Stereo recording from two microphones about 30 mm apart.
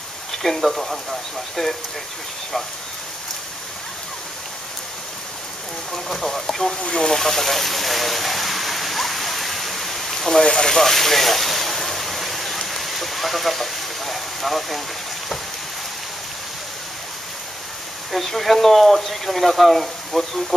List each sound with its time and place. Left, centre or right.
0.4 s speech: centre
1.6 s speech: left
6.0 s speech: centre
6.8 s speech: left
7.2 s stream: centre
10.4 s speech: left
10.7 s a sound: centre
18.1 s speech: centre